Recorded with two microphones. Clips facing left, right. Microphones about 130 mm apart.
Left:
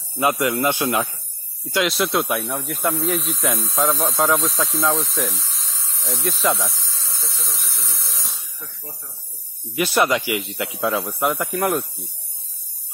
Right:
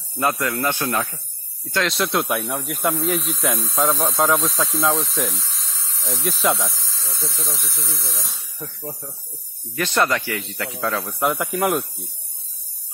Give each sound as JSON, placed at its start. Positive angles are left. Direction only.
{"t": 0.1, "sound": "speech", "side_deg": 10}
{"t": 1.7, "sound": "speech", "side_deg": 5}
{"t": 9.8, "sound": "speech", "side_deg": 10}
{"t": 11.1, "sound": "speech", "side_deg": 0}